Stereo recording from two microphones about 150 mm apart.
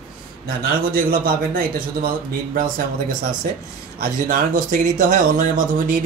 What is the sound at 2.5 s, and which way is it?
Speech, 65° right (ahead or behind).